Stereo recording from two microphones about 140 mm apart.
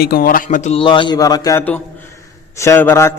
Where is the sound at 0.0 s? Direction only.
90° left; by 0.7 s 70° left (ahead or behind).